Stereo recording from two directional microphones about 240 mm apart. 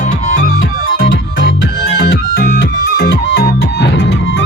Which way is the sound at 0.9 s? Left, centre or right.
Left.